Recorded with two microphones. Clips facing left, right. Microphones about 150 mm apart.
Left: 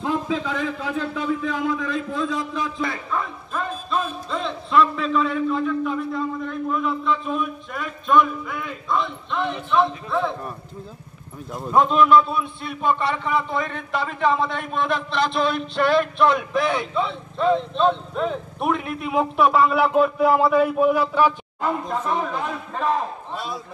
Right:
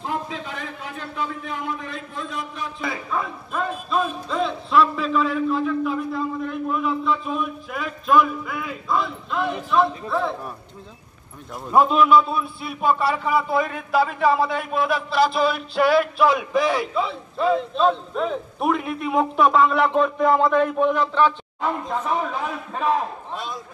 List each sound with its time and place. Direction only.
0.6 s a man's voice: 90° left
2.8 s a man's voice: 5° right (ahead or behind)
11.5 s a man's voice: 5° right (ahead or behind); by 21.6 s 10° left (ahead or behind)
22.0 s a man's voice: centre (ahead or behind)